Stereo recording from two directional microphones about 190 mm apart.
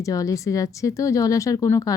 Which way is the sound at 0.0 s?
15° left (ahead or behind).